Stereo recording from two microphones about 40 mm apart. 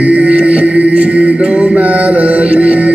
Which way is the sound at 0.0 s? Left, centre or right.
Right.